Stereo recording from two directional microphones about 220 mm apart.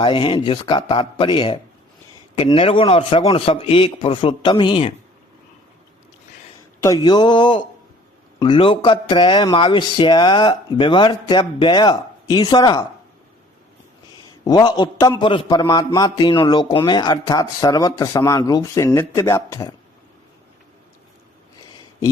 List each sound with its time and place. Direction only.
0.0 s speech: 25° left (ahead or behind)
6.8 s speech: 15° left (ahead or behind)
14.4 s a man's voice: 20° left (ahead or behind)